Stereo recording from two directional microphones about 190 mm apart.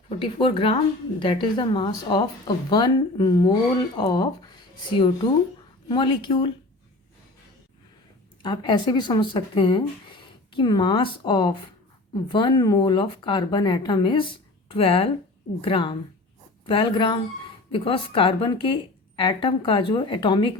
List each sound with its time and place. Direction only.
0.2 s speech: 30° left (ahead or behind)
8.4 s speech: 25° left (ahead or behind)